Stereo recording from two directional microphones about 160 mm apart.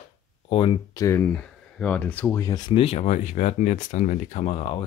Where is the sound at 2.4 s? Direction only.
25° left (ahead or behind).